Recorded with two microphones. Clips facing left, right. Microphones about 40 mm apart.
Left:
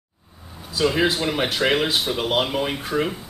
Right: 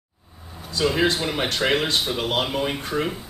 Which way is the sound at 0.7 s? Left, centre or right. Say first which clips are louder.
Left 1 dB; centre.